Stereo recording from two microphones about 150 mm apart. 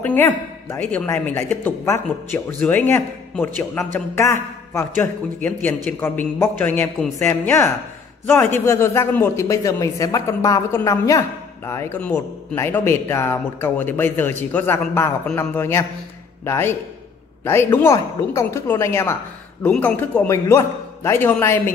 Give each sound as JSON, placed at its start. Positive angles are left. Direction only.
{"t": 0.0, "sound": "speech", "side_deg": 10}